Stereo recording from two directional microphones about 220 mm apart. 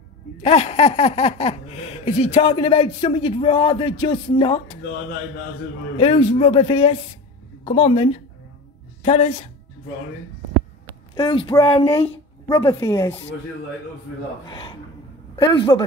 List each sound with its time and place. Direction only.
0.4 s speech: 30° left (ahead or behind)
5.9 s speech: 25° left (ahead or behind)
11.1 s speech: 20° left (ahead or behind)
14.4 s speech: 20° left (ahead or behind)